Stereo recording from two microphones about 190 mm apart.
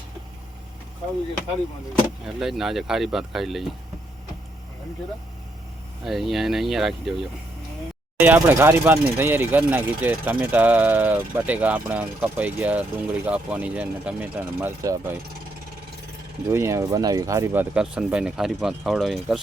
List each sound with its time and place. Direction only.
2.2 s speech: centre (ahead or behind)
6.1 s speech: centre (ahead or behind)
8.2 s speech: 10° right (ahead or behind)
16.5 s speech: 15° right (ahead or behind)